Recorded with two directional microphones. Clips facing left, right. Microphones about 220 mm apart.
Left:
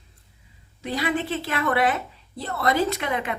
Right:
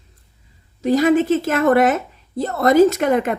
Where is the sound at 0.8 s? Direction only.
45° right (ahead or behind).